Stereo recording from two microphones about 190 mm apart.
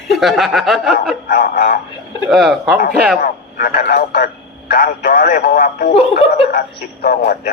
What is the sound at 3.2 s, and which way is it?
Speech, 50° left (ahead or behind).